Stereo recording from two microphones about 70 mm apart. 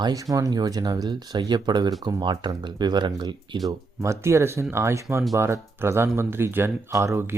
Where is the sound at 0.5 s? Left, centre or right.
Right.